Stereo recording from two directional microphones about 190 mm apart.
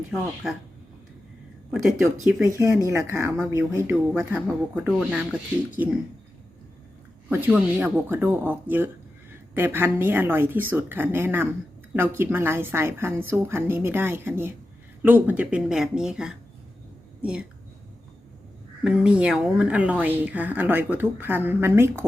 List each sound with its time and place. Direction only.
1.7 s speech: centre (ahead or behind)
2.5 s speech: 15° right (ahead or behind)
7.3 s speech: 10° right (ahead or behind)
18.9 s speech: 5° right (ahead or behind)